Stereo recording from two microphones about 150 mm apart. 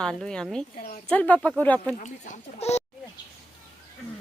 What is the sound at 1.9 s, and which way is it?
Speech, 55° left (ahead or behind).